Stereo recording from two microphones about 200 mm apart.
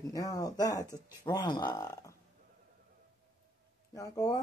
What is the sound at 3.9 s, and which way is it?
Speech, 15° left (ahead or behind).